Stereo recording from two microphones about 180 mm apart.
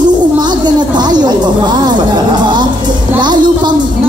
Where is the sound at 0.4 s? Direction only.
25° right (ahead or behind).